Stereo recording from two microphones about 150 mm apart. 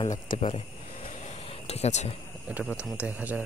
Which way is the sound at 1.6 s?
45° left (ahead or behind).